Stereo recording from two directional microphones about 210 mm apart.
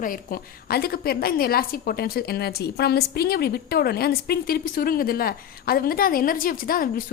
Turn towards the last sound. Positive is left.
turn(degrees=40)  # may be behind; listen again after turning